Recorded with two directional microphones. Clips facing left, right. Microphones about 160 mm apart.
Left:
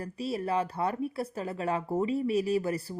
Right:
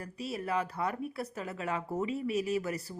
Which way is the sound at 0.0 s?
30° left (ahead or behind).